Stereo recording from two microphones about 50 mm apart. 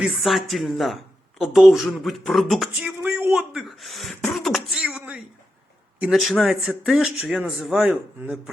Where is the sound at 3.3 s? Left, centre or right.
Centre.